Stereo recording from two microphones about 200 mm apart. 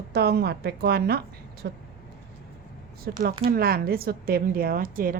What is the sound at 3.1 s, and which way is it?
A woman's voice, 55° right (ahead or behind).